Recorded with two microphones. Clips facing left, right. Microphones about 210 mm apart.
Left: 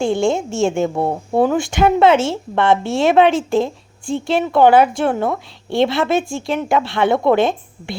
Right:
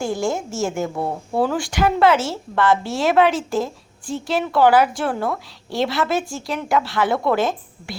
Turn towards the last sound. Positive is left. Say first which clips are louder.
# left 4 dB
turn(degrees=25)  # may be behind; listen again after turning